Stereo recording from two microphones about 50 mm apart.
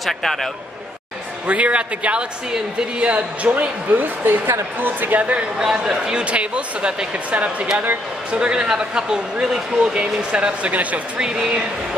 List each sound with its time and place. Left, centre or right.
0.0 s a man's voice: centre
1.5 s speech: right
3.9 s speech: right
5.6 s speech: centre
10.3 s speech: right
11.1 s speech: centre